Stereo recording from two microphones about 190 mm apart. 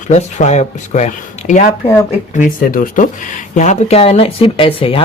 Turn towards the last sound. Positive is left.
turn(degrees=30)  # may be behind; listen again after turning